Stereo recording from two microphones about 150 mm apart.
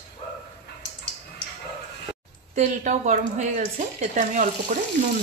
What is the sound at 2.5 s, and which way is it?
A woman's voice, 55° right (ahead or behind).